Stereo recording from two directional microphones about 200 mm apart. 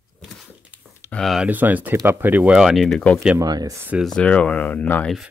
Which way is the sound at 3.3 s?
20° right (ahead or behind).